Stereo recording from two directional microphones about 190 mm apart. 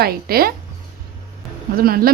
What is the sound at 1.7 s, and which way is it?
Speech, 50° right (ahead or behind).